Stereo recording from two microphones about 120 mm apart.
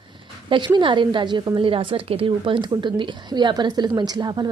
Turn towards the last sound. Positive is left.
turn(degrees=-35)  # may be behind; listen again after turning